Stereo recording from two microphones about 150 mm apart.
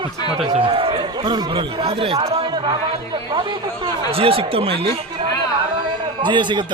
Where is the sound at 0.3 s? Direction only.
40° right (ahead or behind).